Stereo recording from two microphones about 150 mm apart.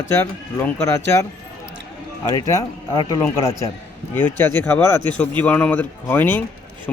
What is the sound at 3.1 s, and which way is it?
Speech, 15° left (ahead or behind).